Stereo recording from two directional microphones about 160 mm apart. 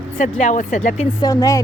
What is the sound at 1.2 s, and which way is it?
Speech, 20° left (ahead or behind).